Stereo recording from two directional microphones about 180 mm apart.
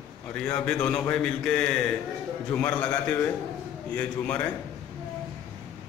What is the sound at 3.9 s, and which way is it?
Speech, 10° left (ahead or behind).